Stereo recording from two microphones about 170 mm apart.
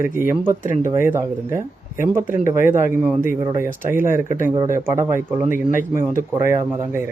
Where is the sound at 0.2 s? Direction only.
15° right (ahead or behind).